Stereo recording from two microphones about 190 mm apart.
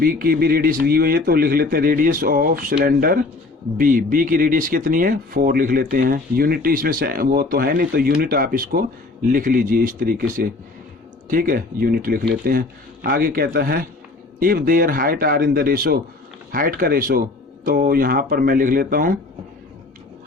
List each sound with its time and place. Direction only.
0.0 s speech: 50° right (ahead or behind)